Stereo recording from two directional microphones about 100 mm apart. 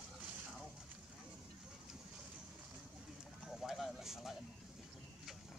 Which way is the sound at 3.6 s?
Centre (ahead or behind).